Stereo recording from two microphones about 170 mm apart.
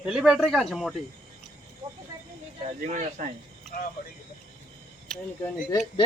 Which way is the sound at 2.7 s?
45° right (ahead or behind).